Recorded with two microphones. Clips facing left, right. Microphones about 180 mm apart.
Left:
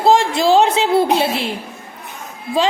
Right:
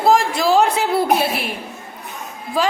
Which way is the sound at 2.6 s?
25° left (ahead or behind).